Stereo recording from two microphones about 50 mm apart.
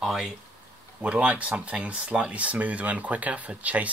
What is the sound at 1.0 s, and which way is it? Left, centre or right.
Speech, right.